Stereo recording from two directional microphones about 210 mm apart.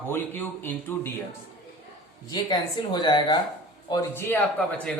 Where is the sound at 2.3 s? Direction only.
20° left (ahead or behind).